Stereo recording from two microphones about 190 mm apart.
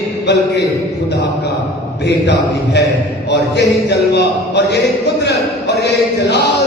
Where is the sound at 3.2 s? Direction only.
65° left (ahead or behind).